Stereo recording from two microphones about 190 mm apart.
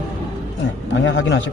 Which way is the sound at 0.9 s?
75° left (ahead or behind).